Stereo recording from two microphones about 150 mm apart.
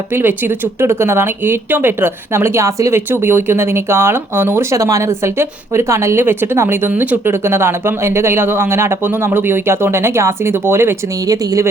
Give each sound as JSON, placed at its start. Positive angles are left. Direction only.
{"t": 0.1, "sound": "speech", "side_deg": -15}